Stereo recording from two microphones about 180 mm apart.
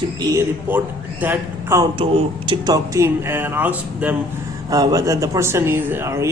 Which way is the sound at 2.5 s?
20° right (ahead or behind).